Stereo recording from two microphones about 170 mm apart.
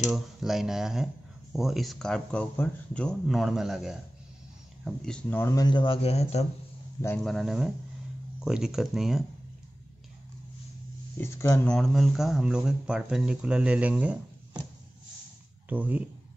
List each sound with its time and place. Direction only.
0.1 s speech: centre (ahead or behind)
5.4 s speech: 20° left (ahead or behind); by 6.4 s 40° left (ahead or behind)
7.2 s speech: centre (ahead or behind)
11.1 s speech: 15° left (ahead or behind)
11.6 s speech: 5° left (ahead or behind)
15.7 s speech: 10° right (ahead or behind)